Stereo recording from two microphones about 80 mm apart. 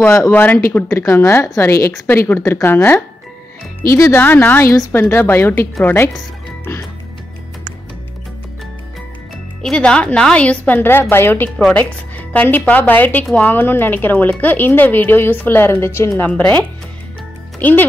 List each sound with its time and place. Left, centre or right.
0.0 s speech: left
0.3 s speech: left
0.8 s speech: left
3.8 s speech: left
9.6 s speech: centre
10.8 s speech: left
16.3 s speech: centre